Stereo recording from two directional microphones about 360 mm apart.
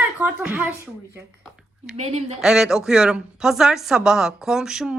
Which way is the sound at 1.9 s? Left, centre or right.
Centre.